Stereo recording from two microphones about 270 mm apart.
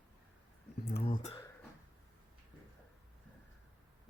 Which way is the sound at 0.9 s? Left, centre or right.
Left.